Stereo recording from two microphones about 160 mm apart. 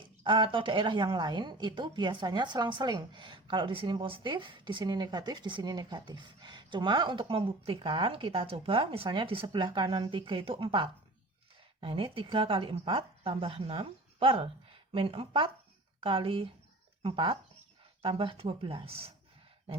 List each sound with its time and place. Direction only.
0.0 s a woman's voice: 30° right (ahead or behind)